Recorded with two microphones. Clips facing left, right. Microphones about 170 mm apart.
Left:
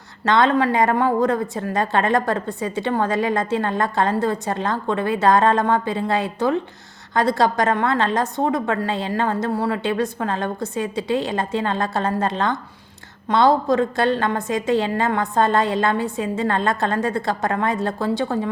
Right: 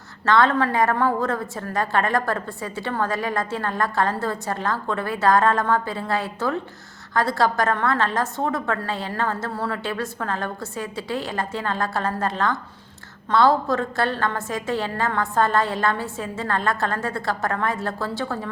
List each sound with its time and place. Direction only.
0.3 s a woman's voice: 20° left (ahead or behind)